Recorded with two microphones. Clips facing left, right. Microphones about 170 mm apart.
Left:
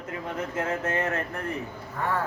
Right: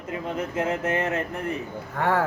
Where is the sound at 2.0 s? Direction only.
85° right.